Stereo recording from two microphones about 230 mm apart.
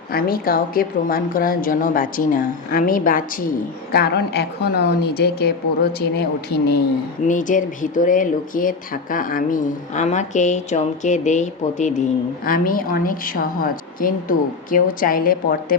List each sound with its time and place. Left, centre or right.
0.1 s a woman's voice: left
7.3 s speech: left